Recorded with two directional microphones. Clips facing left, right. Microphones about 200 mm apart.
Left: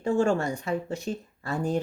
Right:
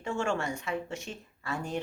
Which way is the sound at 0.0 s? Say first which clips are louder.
Left 7 dB; 35° left (ahead or behind).